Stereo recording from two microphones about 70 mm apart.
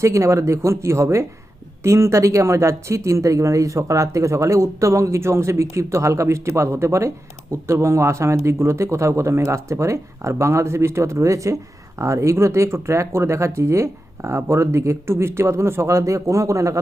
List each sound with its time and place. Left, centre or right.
0.0 s speech: right